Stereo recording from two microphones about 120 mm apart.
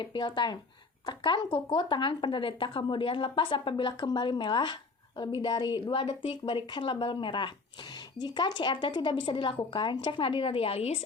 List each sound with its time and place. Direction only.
0.0 s a woman's voice: 40° left (ahead or behind); by 11.0 s 60° left (ahead or behind)